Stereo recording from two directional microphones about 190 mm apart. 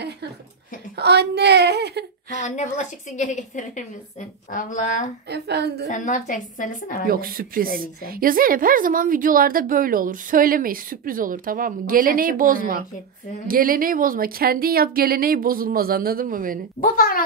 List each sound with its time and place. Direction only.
0.9 s a sound: 60° right (ahead or behind)
2.4 s a woman's voice: 40° left (ahead or behind)
5.3 s a woman's voice: 60° right (ahead or behind)
5.9 s a woman's voice: 40° left (ahead or behind)
7.1 s a woman's voice: 50° right (ahead or behind)
16.8 s a woman's voice: 50° left (ahead or behind)